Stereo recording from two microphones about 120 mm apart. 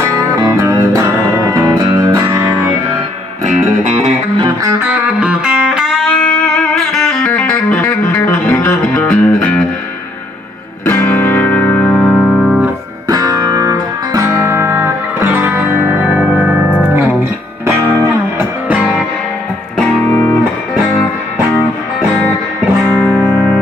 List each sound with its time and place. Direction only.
0.0 s music: 25° right (ahead or behind)
4.8 s music: 10° right (ahead or behind); by 9.7 s 5° left (ahead or behind)
10.9 s music: 15° left (ahead or behind); by 12.6 s 5° right (ahead or behind)
13.1 s music: 30° right (ahead or behind)
18.7 s music: 10° right (ahead or behind)
20.0 s music: 20° left (ahead or behind)
21.5 s music: 25° left (ahead or behind)
23.3 s music: 5° left (ahead or behind)